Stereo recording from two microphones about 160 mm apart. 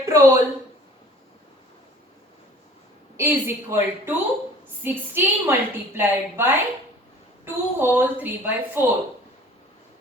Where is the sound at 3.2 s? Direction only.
15° right (ahead or behind).